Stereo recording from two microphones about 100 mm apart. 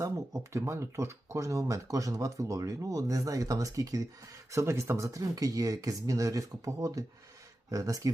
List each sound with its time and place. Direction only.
0.0 s speech: 30° right (ahead or behind)